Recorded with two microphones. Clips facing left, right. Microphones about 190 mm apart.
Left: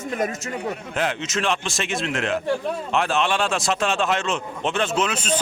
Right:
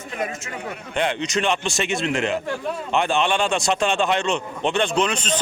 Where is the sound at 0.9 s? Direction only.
5° left (ahead or behind).